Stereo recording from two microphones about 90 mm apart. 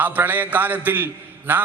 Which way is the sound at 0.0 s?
20° right (ahead or behind).